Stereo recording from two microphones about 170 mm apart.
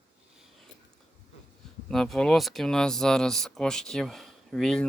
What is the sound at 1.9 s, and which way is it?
Speech, centre (ahead or behind).